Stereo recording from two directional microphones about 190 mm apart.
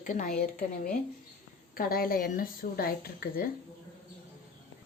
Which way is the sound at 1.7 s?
50° left (ahead or behind).